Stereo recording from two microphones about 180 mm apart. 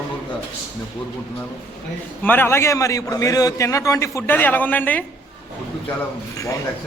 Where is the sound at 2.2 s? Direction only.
10° left (ahead or behind).